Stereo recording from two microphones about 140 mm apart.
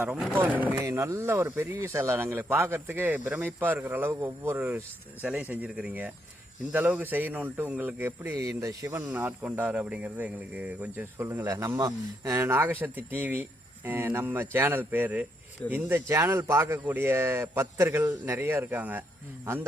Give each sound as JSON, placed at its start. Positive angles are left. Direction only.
{"t": 0.0, "sound": "speech", "side_deg": -5}